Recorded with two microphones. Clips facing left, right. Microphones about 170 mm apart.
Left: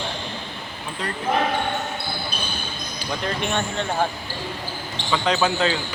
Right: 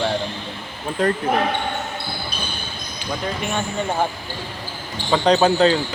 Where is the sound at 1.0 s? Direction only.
45° right (ahead or behind).